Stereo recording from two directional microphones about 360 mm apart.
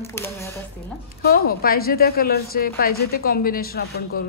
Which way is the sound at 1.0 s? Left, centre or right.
Left.